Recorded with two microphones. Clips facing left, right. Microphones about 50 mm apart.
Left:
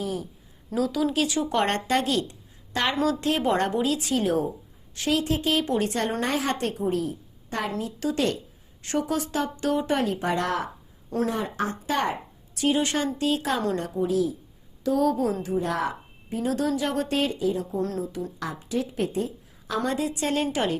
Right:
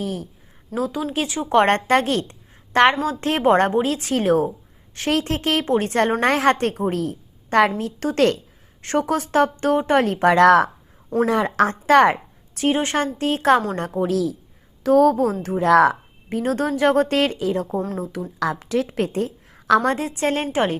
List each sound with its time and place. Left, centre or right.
0.0 s speech: right
0.8 s speech: right
5.6 s speech: right
6.0 s a woman's voice: right
8.8 s speech: right
10.2 s speech: right
12.5 s a woman's voice: right
14.8 s speech: right
15.4 s speech: right
16.6 s speech: right
17.2 s a woman's voice: right
19.9 s speech: right